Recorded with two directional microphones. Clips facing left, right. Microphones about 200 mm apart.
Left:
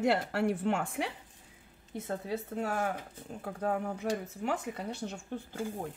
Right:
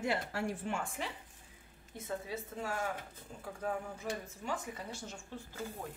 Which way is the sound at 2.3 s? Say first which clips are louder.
Left 6 dB; 60° left (ahead or behind).